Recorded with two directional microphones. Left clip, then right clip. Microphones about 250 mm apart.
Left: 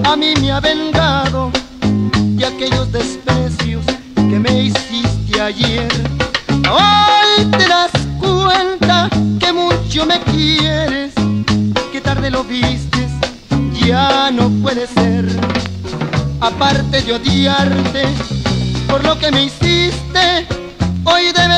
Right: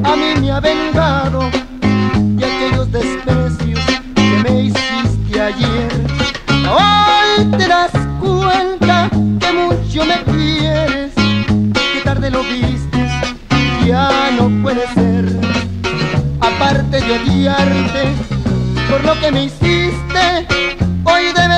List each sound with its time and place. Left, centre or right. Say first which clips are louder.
0.0 s music: left 1 dB; right
4.2 s music: even; right
6.7 s music: left 1 dB; right
13.6 s music: even; right
16.4 s music: right 1 dB; right
19.2 s music: left 1 dB; right